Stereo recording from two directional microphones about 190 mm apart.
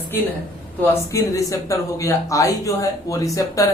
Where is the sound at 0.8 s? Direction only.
15° left (ahead or behind).